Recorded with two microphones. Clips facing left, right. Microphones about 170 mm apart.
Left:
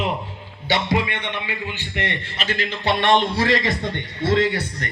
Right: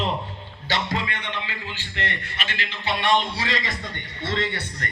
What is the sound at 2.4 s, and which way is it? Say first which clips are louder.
A man's voice: left 7 dB; 40° left (ahead or behind).